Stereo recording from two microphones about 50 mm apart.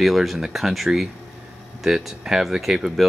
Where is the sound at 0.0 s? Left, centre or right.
Centre.